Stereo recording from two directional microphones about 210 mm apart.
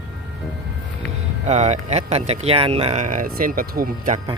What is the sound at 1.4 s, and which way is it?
Speech, 35° right (ahead or behind).